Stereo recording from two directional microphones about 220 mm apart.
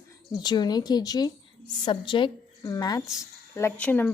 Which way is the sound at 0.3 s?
20° left (ahead or behind).